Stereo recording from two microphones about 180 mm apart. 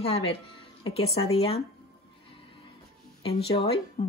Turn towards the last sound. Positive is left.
turn(degrees=35)  # may be behind; listen again after turning